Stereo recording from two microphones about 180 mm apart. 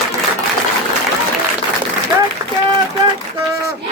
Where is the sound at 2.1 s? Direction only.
10° right (ahead or behind).